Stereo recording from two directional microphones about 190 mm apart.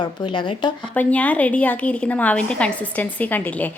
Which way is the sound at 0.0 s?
25° left (ahead or behind).